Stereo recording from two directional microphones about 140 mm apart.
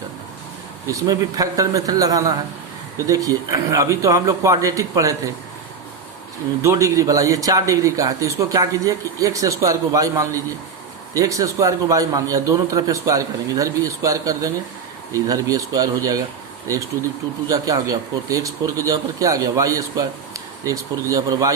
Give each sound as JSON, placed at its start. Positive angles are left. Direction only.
{"t": 0.9, "sound": "speech", "side_deg": -25}
{"t": 6.6, "sound": "speech", "side_deg": -20}
{"t": 17.5, "sound": "speech", "side_deg": -25}